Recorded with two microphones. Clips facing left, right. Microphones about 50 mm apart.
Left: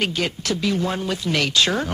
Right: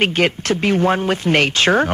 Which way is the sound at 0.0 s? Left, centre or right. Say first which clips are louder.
Right 7 dB; right.